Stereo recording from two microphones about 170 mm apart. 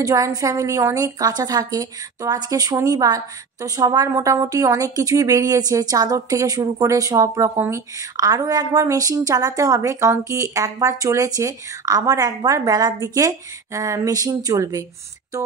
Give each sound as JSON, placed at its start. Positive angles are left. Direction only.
{"t": 0.0, "sound": "speech", "side_deg": -20}